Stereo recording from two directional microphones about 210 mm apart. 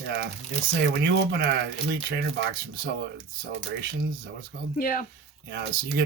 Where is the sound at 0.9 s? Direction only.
50° right (ahead or behind).